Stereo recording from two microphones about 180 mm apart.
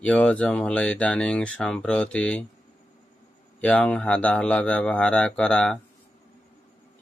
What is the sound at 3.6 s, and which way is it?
Speech, 5° left (ahead or behind).